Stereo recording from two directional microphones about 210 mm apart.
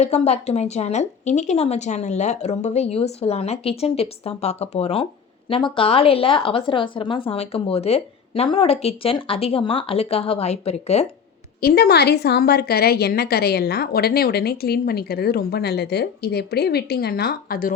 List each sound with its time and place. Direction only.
0.0 s a woman's voice: 30° left (ahead or behind)
11.6 s a woman's voice: 50° left (ahead or behind)